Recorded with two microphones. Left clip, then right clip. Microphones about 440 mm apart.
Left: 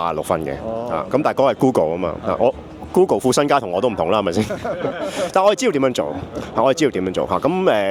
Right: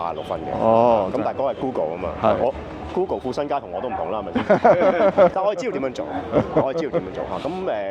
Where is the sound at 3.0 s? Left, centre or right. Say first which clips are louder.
Left 9 dB; left.